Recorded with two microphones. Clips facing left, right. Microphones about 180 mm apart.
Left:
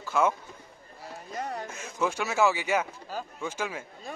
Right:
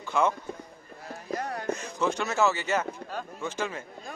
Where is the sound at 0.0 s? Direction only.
5° left (ahead or behind).